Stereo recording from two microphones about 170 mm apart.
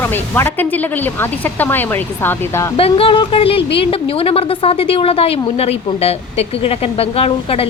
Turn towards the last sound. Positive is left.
turn(degrees=35)  # may be behind; listen again after turning